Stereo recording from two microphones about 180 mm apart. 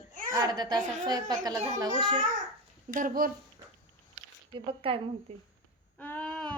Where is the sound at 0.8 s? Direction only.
45° right (ahead or behind).